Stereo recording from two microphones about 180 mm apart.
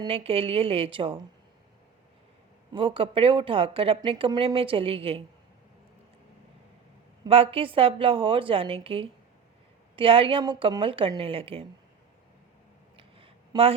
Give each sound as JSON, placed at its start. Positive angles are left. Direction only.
{"t": 0.0, "sound": "a woman's voice", "side_deg": -30}
{"t": 2.7, "sound": "a woman's voice", "side_deg": -30}
{"t": 7.3, "sound": "a woman's voice", "side_deg": -30}
{"t": 13.0, "sound": "a sound", "side_deg": -30}